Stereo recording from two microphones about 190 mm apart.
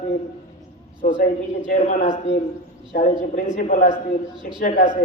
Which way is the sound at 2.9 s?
50° left (ahead or behind).